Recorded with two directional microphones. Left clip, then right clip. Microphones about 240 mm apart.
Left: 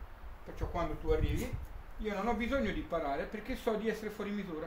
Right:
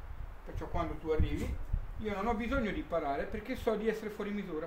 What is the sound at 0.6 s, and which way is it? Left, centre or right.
A man's voice, centre.